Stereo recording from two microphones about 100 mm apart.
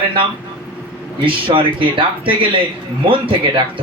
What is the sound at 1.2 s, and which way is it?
Speech, 60° right (ahead or behind).